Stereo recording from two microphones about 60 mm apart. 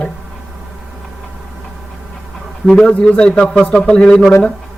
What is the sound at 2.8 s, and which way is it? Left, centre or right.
A man's voice, centre.